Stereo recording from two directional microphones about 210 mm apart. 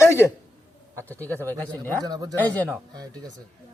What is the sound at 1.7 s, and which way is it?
Speech, 15° right (ahead or behind).